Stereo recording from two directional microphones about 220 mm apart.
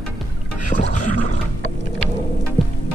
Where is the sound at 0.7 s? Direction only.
40° left (ahead or behind).